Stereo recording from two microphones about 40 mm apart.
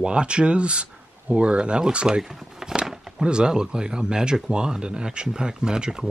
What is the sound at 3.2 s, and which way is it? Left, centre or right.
Speech, right.